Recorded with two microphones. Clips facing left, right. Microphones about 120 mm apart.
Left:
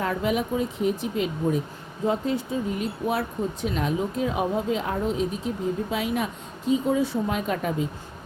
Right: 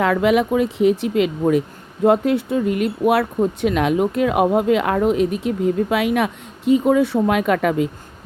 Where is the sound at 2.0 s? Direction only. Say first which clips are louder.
Right 9 dB; 70° right (ahead or behind).